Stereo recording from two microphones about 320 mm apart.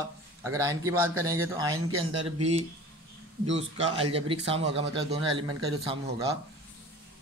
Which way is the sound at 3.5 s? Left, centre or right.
Centre.